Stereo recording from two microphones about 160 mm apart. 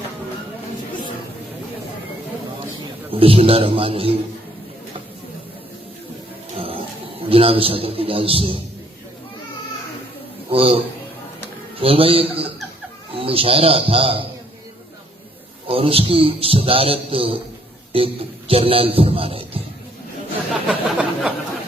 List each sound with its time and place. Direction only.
3.1 s a man's voice: 35° right (ahead or behind)
7.3 s a man's voice: 35° right (ahead or behind)
10.5 s a man's voice: 35° right (ahead or behind)
11.8 s a man's voice: 35° right (ahead or behind)
15.6 s a man's voice: 35° right (ahead or behind)
20.5 s a sound: 5° right (ahead or behind)